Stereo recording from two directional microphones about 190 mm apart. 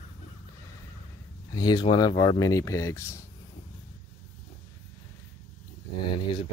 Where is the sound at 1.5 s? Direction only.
20° left (ahead or behind).